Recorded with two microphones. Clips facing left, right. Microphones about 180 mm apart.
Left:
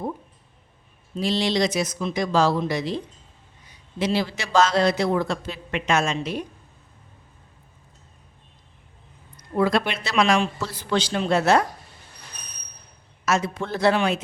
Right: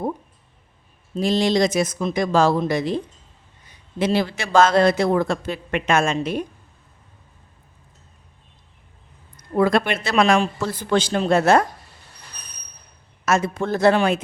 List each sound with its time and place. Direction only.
1.1 s a man's voice: 45° right (ahead or behind)
9.6 s a man's voice: 50° right (ahead or behind)
13.2 s a man's voice: 50° right (ahead or behind)